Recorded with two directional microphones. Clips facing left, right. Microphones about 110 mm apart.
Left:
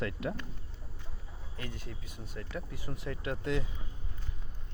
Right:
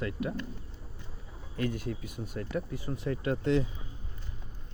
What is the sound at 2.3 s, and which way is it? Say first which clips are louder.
Speech: right 6 dB; 40° right (ahead or behind).